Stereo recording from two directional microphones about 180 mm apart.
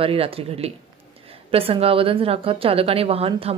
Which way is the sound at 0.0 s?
30° right (ahead or behind).